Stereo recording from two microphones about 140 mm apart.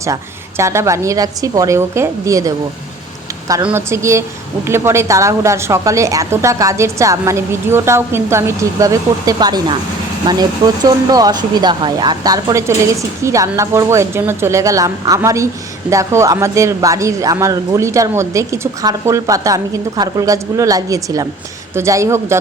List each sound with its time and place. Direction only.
0.0 s speech: 20° right (ahead or behind)
3.7 s speech: 20° right (ahead or behind)